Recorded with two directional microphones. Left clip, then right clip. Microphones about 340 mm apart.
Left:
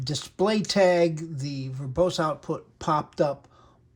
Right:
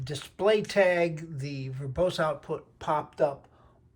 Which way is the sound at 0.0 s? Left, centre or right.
Centre.